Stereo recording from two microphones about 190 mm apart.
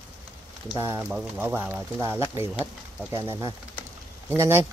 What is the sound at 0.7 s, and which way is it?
Speech, 10° right (ahead or behind).